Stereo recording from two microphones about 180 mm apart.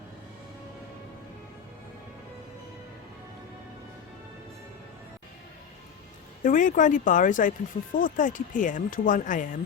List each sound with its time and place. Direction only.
6.4 s speech: 45° left (ahead or behind)